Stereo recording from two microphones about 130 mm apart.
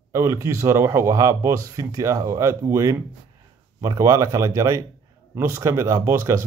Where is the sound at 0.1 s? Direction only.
20° right (ahead or behind).